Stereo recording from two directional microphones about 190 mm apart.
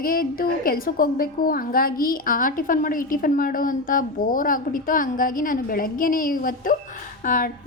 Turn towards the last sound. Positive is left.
turn(degrees=45)  # may be behind; listen again after turning